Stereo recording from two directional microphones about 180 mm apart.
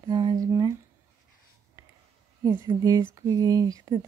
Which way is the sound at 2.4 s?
20° right (ahead or behind).